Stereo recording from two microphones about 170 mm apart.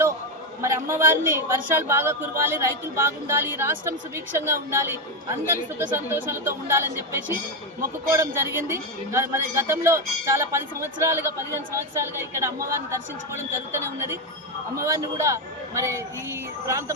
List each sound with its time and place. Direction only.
0.6 s a man's voice: 15° right (ahead or behind)
6.1 s a man's voice: 15° right (ahead or behind)
14.8 s a man's voice: 20° right (ahead or behind)